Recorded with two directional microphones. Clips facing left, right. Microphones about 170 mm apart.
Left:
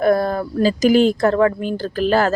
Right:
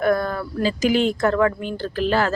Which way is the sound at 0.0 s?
35° left (ahead or behind).